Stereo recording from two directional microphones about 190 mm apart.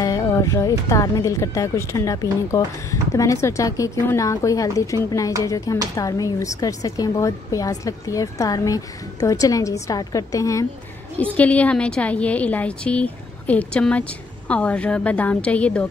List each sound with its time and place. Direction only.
0.0 s a woman's voice: 15° left (ahead or behind)